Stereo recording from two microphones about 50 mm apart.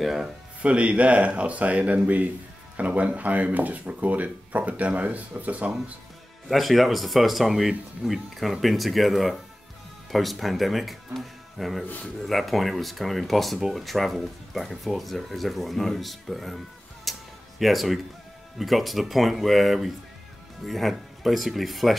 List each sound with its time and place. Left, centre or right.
0.0 s speech: centre
0.6 s speech: right
6.5 s speech: centre
11.8 s a man's voice: left
12.3 s speech: centre